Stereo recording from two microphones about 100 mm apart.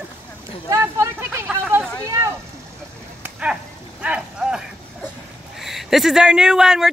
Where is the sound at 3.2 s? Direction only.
10° right (ahead or behind).